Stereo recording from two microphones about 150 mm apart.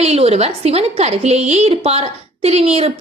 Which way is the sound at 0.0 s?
45° right (ahead or behind).